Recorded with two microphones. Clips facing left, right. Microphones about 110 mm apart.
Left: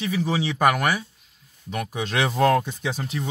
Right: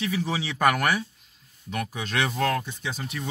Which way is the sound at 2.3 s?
30° left (ahead or behind).